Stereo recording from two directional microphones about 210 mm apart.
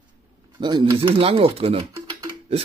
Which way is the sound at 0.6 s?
20° right (ahead or behind).